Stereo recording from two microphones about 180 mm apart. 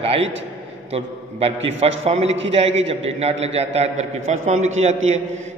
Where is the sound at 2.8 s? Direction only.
35° right (ahead or behind).